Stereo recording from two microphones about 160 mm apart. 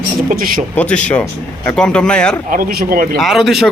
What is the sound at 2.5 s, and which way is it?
Speech, 65° right (ahead or behind).